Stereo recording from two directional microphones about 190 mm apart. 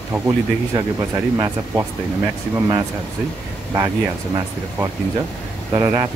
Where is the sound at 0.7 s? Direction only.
20° right (ahead or behind).